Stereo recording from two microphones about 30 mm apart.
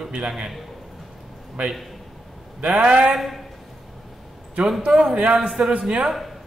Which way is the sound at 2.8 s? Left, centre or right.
Right.